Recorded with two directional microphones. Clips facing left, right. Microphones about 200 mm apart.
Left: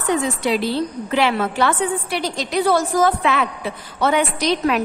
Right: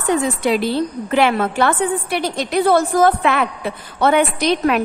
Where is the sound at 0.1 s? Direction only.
50° right (ahead or behind).